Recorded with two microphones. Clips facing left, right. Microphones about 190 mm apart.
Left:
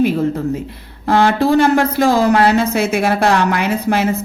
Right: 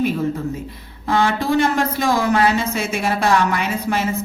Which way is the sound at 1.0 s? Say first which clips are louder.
Left 5 dB; 65° left (ahead or behind).